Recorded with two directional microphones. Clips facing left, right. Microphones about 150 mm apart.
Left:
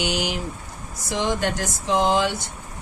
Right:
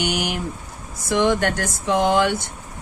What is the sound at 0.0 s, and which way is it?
Speech, 55° right (ahead or behind).